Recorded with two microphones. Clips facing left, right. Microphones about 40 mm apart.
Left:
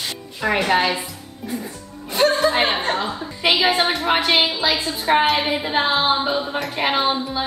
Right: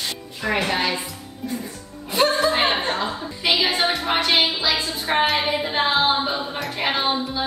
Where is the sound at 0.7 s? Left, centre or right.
Centre.